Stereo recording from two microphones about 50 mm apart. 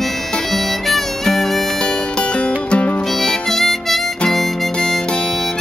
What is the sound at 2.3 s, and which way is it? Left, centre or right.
Music, left.